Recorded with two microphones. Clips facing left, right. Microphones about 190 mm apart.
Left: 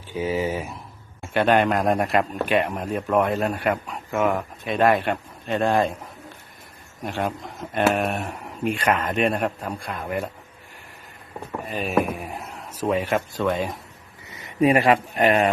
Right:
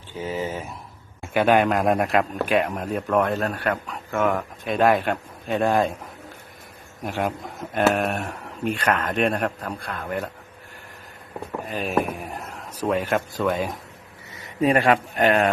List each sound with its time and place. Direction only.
0.1 s a man's voice: 10° left (ahead or behind)
1.3 s a man's voice: 5° right (ahead or behind)
7.0 s a man's voice: 5° right (ahead or behind)
11.6 s a man's voice: centre (ahead or behind)
14.3 s a sound: 20° left (ahead or behind)
14.9 s a man's voice: centre (ahead or behind)